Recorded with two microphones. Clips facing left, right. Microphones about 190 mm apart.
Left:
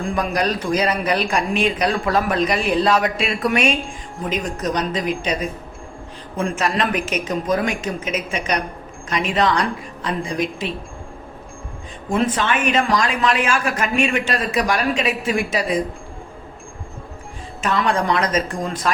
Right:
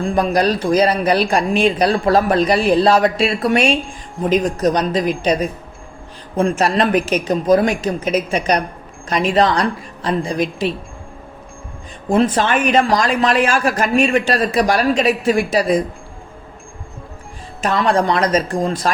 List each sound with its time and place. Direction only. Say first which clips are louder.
0.0 s speech: right 5 dB; 35° right (ahead or behind)
12.0 s speech: right 5 dB; 35° right (ahead or behind)
17.6 s speech: right 4 dB; 35° right (ahead or behind)